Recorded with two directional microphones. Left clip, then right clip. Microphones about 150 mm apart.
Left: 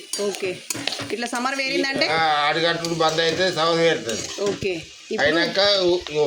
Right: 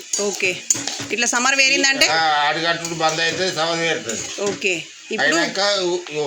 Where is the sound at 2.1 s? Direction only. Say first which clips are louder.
Right 2 dB; 20° left (ahead or behind).